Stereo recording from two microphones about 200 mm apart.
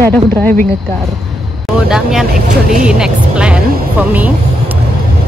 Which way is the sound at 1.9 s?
5° right (ahead or behind).